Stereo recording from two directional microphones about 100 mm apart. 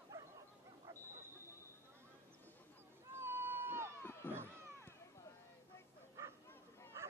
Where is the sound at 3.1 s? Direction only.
25° right (ahead or behind).